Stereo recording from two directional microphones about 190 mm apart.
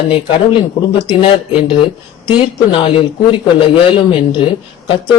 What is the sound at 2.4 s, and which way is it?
A man's voice, 25° left (ahead or behind).